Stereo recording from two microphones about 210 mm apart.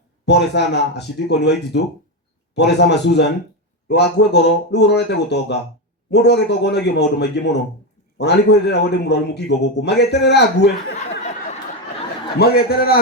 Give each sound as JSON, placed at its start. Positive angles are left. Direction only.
{"t": 0.3, "sound": "a man's voice", "side_deg": 55}
{"t": 12.4, "sound": "a man's voice", "side_deg": 50}